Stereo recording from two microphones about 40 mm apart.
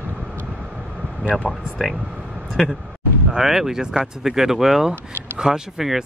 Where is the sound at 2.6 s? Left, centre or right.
Centre.